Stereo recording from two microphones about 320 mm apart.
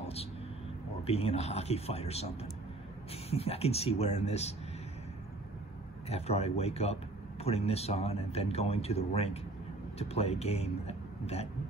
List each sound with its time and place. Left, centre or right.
1.0 s speech: centre
6.0 s speech: centre